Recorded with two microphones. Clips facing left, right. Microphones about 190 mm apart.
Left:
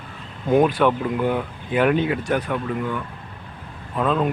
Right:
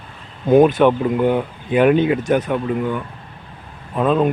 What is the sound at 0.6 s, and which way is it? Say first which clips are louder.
Speech: right 5 dB; 20° right (ahead or behind).